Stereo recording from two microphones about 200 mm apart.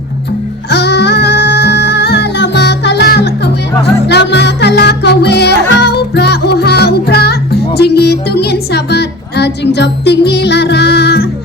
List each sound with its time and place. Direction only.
0.7 s music: 55° left (ahead or behind)